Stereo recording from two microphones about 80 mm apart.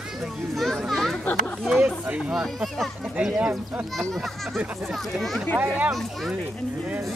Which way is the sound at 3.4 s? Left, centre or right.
Centre.